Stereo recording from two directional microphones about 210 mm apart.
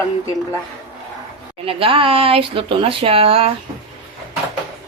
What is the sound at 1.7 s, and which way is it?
Speech, 25° right (ahead or behind).